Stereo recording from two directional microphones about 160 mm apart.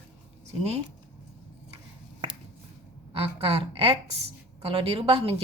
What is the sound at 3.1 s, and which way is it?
A woman's voice, 35° right (ahead or behind).